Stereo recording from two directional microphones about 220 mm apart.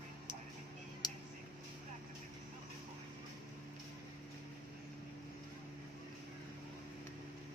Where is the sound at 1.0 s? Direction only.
20° left (ahead or behind).